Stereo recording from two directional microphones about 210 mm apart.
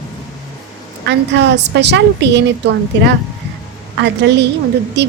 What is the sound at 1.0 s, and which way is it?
A woman's voice, 55° right (ahead or behind).